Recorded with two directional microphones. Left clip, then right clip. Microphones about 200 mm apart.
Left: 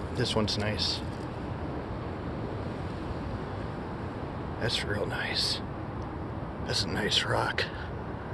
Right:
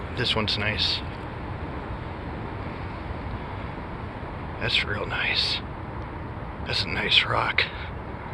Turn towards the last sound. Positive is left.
turn(degrees=25)  # may be behind; listen again after turning